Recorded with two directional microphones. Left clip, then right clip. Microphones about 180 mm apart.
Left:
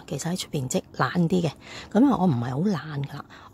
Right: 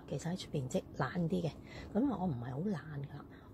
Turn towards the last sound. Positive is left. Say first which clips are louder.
# left 13 dB
turn(degrees=50)  # may be behind; listen again after turning